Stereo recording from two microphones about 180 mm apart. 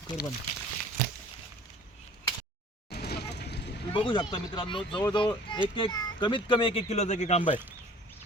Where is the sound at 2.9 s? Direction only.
65° left (ahead or behind).